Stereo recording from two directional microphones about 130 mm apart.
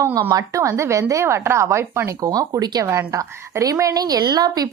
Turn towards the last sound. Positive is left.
turn(degrees=-30)  # may be behind; listen again after turning